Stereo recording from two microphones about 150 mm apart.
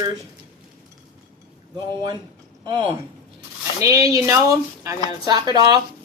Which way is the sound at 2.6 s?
30° right (ahead or behind).